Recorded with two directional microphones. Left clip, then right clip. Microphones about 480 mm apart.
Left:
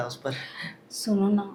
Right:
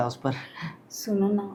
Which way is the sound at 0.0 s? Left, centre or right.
Right.